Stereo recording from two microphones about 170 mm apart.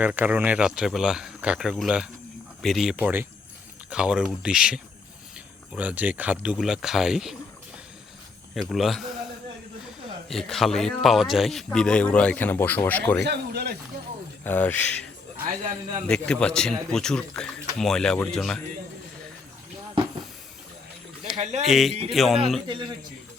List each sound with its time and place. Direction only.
0.0 s speech: 10° right (ahead or behind)
8.5 s speech: centre (ahead or behind)
10.2 s speech: centre (ahead or behind)
13.2 s speech: 70° right (ahead or behind)
14.4 s speech: 10° left (ahead or behind)
16.0 s speech: 5° left (ahead or behind)
21.3 s a sound: 45° right (ahead or behind)
21.6 s speech: centre (ahead or behind)
22.6 s a man's voice: 25° right (ahead or behind)